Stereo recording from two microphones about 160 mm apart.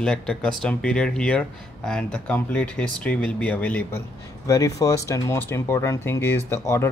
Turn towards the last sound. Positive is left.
turn(degrees=15)  # may be behind; listen again after turning